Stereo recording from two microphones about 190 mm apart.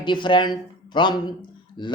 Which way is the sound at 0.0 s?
25° left (ahead or behind).